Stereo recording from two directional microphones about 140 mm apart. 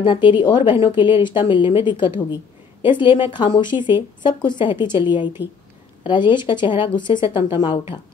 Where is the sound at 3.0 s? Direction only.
35° left (ahead or behind).